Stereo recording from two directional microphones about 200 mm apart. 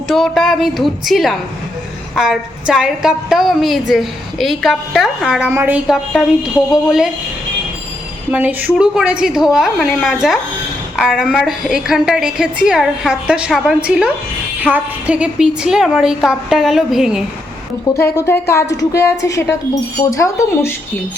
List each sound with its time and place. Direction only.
0.1 s a woman's voice: centre (ahead or behind)
8.3 s a woman's voice: 5° right (ahead or behind)
17.9 s speech: 10° left (ahead or behind)